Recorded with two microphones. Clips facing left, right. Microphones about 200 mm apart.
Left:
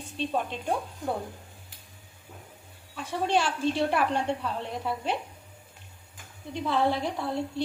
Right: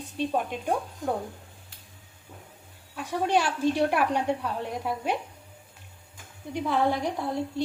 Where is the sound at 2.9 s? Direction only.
15° right (ahead or behind).